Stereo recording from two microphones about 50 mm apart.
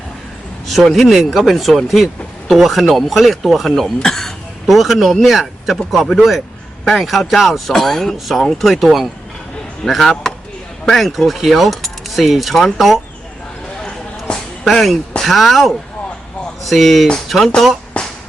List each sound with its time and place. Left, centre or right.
0.9 s speech: centre
13.8 s a sound: centre
15.2 s speech: centre